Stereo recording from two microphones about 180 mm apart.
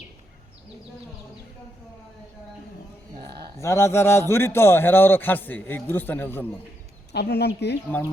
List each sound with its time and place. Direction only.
3.6 s a man's voice: 15° left (ahead or behind)
7.1 s speech: 65° left (ahead or behind)